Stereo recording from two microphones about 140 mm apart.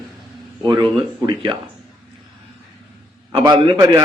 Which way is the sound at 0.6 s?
35° right (ahead or behind).